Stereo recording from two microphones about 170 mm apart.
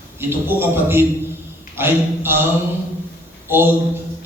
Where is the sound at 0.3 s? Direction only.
15° right (ahead or behind).